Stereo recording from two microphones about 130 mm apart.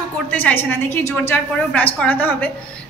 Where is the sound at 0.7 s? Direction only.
15° left (ahead or behind).